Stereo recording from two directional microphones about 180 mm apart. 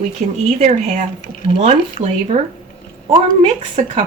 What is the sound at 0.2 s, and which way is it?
Speech, 40° right (ahead or behind).